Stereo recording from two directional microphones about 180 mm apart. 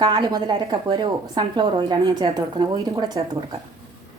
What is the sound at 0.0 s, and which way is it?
A woman's voice, 25° right (ahead or behind).